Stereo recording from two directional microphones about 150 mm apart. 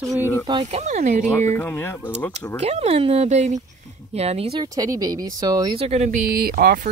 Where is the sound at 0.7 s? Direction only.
45° right (ahead or behind).